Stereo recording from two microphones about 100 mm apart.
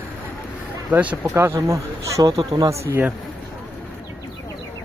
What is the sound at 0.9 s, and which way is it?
Speech, 15° right (ahead or behind).